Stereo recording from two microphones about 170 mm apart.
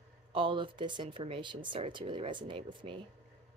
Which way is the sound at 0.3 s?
30° right (ahead or behind).